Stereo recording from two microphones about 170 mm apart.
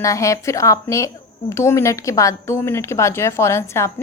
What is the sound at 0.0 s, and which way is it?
A woman's voice, 20° left (ahead or behind).